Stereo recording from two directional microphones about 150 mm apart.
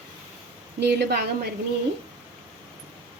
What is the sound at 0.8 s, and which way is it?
Speech, 90° right.